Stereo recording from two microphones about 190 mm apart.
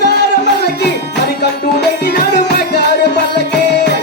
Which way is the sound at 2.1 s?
60° left (ahead or behind).